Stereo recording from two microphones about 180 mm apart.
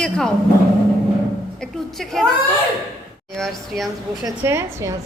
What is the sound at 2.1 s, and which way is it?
Speech, centre (ahead or behind).